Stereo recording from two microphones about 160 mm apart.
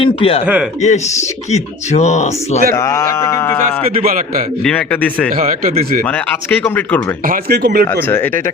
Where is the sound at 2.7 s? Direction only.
20° left (ahead or behind).